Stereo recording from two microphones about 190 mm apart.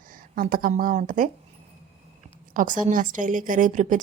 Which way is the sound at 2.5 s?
45° right (ahead or behind).